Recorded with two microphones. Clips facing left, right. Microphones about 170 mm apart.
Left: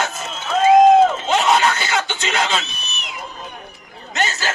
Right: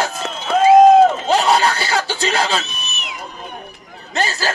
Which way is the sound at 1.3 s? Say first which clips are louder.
Right 1 dB; 35° right (ahead or behind).